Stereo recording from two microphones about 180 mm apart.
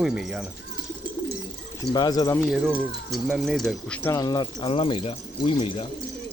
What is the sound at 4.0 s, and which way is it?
Speech, 15° left (ahead or behind).